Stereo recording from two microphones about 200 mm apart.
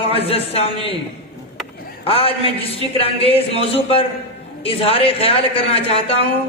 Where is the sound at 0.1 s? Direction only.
30° left (ahead or behind).